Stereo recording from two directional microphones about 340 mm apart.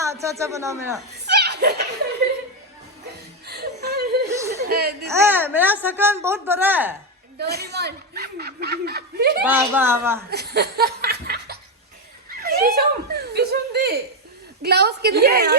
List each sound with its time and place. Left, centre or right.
0.0 s speech: centre
1.1 s chuckle: right
3.4 s chuckle: right
4.6 s speech: right
5.0 s speech: centre
7.3 s speech: right
9.4 s speech: centre
10.2 s laughter: right
12.3 s chuckle: right
14.6 s speech: right